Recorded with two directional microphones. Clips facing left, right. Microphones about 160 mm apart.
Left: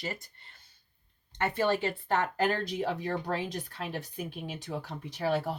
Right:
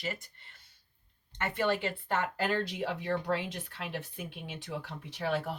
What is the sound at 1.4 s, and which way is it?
Speech, 35° left (ahead or behind).